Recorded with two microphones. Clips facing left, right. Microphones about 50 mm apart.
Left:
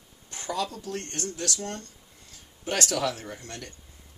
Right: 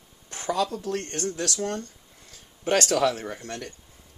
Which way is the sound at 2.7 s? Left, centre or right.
Right.